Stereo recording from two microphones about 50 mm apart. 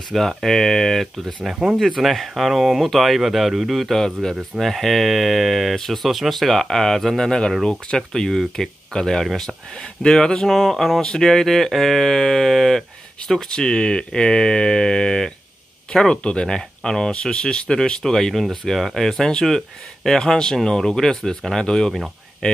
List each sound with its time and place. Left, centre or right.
0.1 s speech: centre
1.5 s speech: centre
1.8 s speech: centre